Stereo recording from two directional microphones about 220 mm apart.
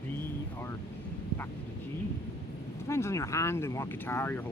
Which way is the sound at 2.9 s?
10° left (ahead or behind).